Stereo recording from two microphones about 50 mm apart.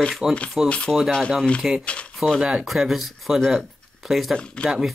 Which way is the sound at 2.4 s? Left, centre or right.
Centre.